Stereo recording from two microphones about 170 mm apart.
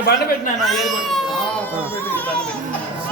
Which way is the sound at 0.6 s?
Centre (ahead or behind).